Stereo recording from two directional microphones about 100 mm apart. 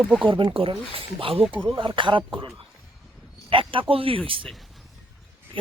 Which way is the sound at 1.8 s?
55° right (ahead or behind).